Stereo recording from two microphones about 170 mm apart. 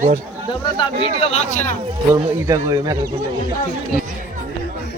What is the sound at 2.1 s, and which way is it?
Speech, 20° right (ahead or behind).